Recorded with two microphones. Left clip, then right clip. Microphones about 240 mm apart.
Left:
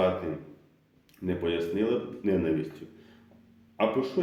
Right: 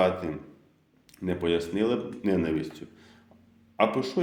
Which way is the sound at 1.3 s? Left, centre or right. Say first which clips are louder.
Right 2 dB; right.